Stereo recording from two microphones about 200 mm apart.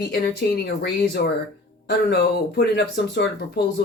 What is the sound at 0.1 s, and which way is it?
Speech, 55° left (ahead or behind).